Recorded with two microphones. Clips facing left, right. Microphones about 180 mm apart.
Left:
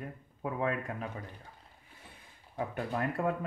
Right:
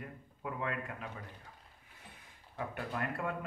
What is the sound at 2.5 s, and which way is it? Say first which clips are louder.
Speech: left 4 dB; 35° left (ahead or behind).